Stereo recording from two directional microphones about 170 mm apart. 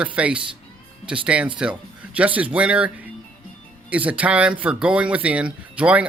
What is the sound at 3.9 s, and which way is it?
Speech, 10° right (ahead or behind).